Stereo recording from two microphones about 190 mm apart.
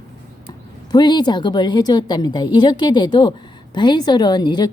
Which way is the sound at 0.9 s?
20° left (ahead or behind).